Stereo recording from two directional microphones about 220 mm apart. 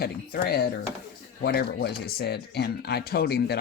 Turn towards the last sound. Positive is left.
turn(degrees=45)  # may be behind; listen again after turning